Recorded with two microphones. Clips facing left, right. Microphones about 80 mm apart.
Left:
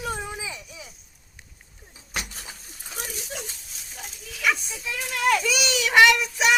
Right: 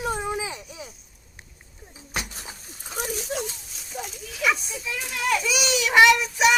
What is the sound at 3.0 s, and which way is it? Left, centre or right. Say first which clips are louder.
Speech: right 7 dB; right.